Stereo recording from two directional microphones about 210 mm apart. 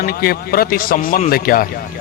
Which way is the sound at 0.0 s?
45° left (ahead or behind).